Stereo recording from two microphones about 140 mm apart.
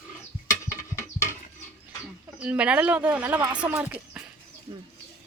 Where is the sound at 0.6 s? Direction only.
20° left (ahead or behind).